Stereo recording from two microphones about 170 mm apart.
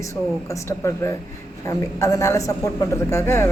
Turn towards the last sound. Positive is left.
turn(degrees=15)  # may be behind; listen again after turning